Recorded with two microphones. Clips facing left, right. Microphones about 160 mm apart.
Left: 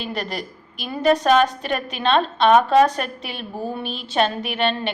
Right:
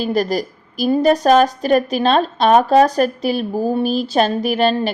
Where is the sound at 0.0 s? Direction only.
40° right (ahead or behind).